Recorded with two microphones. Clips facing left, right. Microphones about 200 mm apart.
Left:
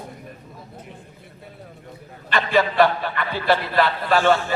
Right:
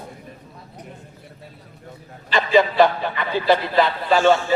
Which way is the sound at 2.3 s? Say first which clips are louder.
Right 2 dB; 20° right (ahead or behind).